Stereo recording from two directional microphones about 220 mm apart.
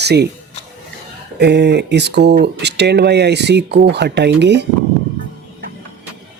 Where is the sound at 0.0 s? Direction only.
50° right (ahead or behind).